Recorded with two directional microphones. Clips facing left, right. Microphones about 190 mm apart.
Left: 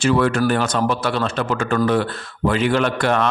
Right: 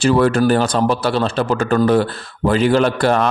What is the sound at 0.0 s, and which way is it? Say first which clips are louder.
A man's voice: right 3 dB; 35° right (ahead or behind).